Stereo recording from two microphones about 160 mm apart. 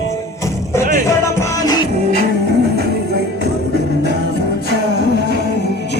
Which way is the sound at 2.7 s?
90° right.